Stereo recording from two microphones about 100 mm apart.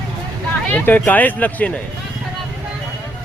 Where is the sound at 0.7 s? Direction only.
20° left (ahead or behind).